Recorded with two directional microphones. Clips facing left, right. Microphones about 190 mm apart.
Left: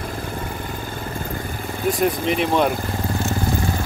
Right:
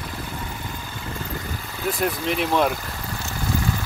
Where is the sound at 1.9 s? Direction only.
Centre (ahead or behind).